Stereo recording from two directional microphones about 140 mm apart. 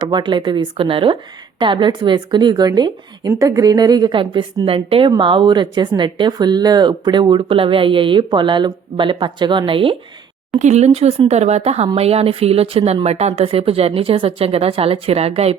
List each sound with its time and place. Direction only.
0.0 s a woman's voice: 35° right (ahead or behind)
10.6 s speech: 55° right (ahead or behind)